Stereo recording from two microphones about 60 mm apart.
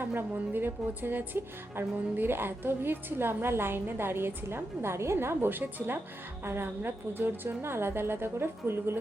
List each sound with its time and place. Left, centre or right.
0.0 s a woman's voice: right